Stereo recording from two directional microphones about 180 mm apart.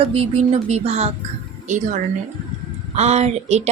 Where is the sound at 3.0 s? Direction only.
40° right (ahead or behind).